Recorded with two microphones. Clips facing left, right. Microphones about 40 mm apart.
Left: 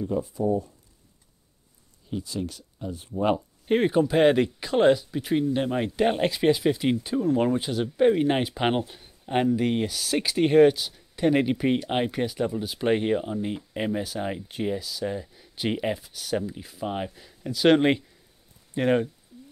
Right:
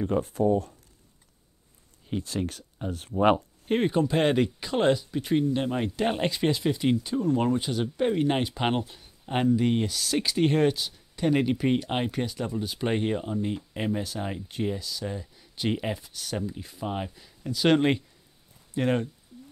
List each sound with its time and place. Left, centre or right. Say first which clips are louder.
0.0 s speech: right 2 dB; right
2.0 s speech: right 1 dB; right
3.6 s speech: left 3 dB; centre